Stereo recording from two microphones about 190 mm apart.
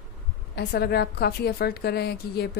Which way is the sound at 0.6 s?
60° left (ahead or behind).